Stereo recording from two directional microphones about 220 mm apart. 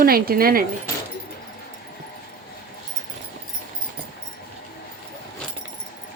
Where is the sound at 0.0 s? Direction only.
45° right (ahead or behind).